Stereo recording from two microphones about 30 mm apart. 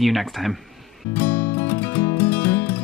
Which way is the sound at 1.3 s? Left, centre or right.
Left.